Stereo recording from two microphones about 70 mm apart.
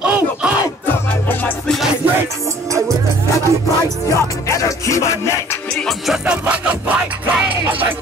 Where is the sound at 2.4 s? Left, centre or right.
Right.